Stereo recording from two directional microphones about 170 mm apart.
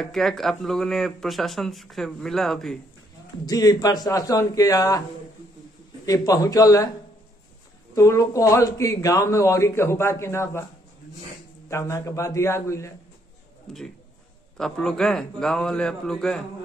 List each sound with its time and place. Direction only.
0.0 s speech: centre (ahead or behind)
3.4 s speech: 20° left (ahead or behind)
6.0 s speech: 20° left (ahead or behind)
7.9 s speech: 20° left (ahead or behind)
11.7 s a man's voice: 15° left (ahead or behind)
13.7 s speech: 5° left (ahead or behind)